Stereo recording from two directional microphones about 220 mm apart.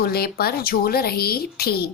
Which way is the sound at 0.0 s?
45° left (ahead or behind).